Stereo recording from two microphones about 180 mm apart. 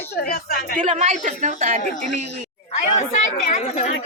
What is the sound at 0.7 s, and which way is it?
Speech, 40° right (ahead or behind).